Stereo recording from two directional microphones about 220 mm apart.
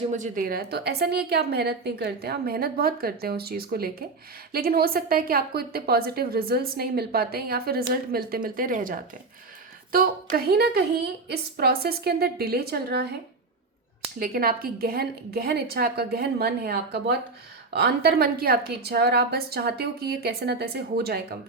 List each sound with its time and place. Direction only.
0.1 s a woman's voice: 35° right (ahead or behind)
14.2 s a woman's voice: 40° right (ahead or behind)